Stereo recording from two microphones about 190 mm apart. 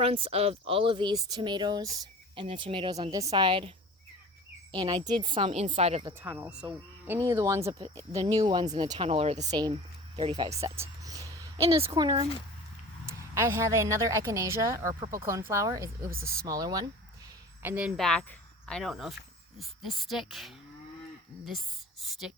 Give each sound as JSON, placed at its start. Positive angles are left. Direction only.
{"t": 0.0, "sound": "speech", "side_deg": -30}
{"t": 4.7, "sound": "speech", "side_deg": -25}
{"t": 6.1, "sound": "a woman's voice", "side_deg": -10}
{"t": 7.8, "sound": "speech", "side_deg": -35}
{"t": 9.5, "sound": "speech", "side_deg": -20}
{"t": 10.6, "sound": "a sound", "side_deg": -15}
{"t": 11.6, "sound": "speech", "side_deg": -30}
{"t": 13.1, "sound": "a woman's voice", "side_deg": -15}
{"t": 17.6, "sound": "a woman's voice", "side_deg": -10}